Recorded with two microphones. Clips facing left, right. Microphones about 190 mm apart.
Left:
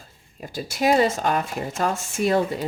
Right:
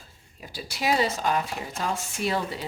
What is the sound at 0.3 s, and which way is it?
Speech, 45° left (ahead or behind).